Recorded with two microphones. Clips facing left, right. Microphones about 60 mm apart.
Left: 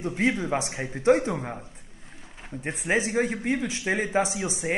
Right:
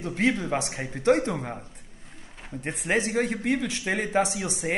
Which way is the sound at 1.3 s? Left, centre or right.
Centre.